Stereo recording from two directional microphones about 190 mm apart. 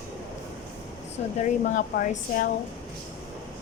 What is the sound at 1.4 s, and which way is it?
Speech, 45° left (ahead or behind).